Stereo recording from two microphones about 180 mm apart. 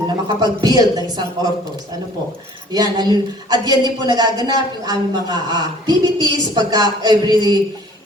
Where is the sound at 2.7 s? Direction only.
25° right (ahead or behind).